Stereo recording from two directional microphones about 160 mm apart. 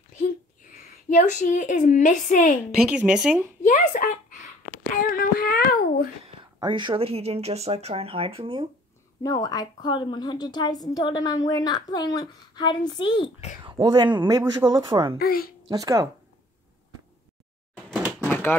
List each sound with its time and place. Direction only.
1.0 s a woman's voice: 50° left (ahead or behind)
2.7 s speech: 5° right (ahead or behind)
3.6 s a sound: 50° left (ahead or behind); by 6.0 s 70° left (ahead or behind)
6.2 s speech: 30° right (ahead or behind)
9.2 s a woman's voice: 25° left (ahead or behind)
13.6 s speech: 25° right (ahead or behind)
15.1 s a woman's voice: 65° left (ahead or behind)
15.7 s speech: 20° right (ahead or behind)
18.3 s typewriter: 10° left (ahead or behind)